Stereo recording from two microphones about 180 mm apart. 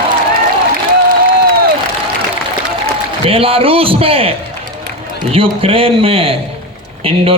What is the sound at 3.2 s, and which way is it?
A man's voice, 30° right (ahead or behind).